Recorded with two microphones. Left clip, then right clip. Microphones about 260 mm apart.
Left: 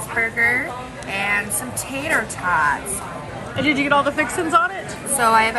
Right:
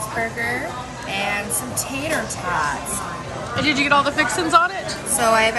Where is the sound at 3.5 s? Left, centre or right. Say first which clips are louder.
Even; centre.